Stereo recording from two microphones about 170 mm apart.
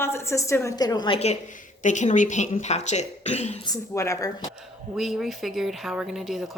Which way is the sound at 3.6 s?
20° left (ahead or behind).